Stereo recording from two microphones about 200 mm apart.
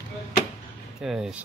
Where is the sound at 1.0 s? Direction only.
Centre (ahead or behind).